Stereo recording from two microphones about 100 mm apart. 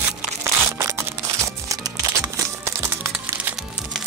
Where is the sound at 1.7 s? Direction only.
40° right (ahead or behind).